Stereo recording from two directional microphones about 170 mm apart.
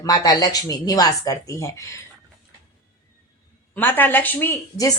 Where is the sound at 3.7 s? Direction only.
10° left (ahead or behind).